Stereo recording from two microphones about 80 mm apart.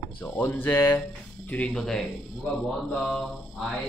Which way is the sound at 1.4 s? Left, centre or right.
Centre.